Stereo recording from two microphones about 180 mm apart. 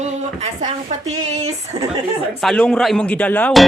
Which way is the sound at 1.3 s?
35° right (ahead or behind).